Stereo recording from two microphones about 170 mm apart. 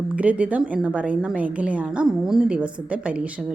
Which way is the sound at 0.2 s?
10° right (ahead or behind).